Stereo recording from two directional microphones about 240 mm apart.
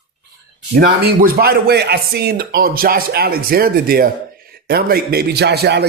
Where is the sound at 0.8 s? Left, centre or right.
Right.